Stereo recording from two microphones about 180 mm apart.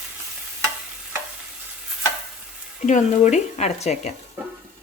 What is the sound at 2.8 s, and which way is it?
Speech, 40° left (ahead or behind).